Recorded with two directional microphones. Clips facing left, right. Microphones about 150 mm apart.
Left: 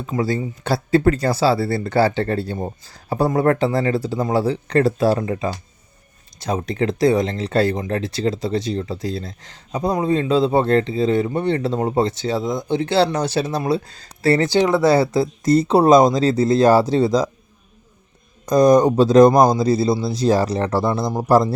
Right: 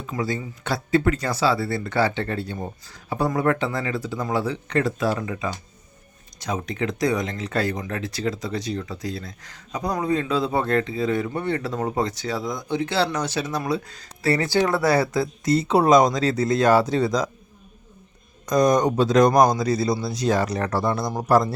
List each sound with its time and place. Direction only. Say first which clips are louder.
0.0 s speech: left 5 dB; 35° left (ahead or behind)
18.4 s speech: left 6 dB; 35° left (ahead or behind)